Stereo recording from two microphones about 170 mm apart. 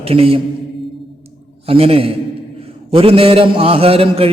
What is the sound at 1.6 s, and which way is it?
A man's voice, 35° right (ahead or behind).